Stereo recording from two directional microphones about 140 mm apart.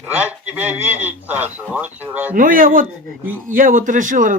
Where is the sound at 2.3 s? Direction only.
80° right.